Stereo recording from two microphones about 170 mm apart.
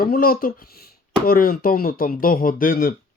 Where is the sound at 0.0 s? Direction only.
60° left (ahead or behind).